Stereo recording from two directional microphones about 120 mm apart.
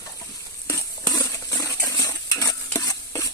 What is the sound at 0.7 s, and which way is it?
Stir, 30° left (ahead or behind).